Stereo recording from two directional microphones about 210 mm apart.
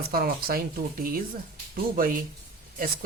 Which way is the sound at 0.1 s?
45° right (ahead or behind).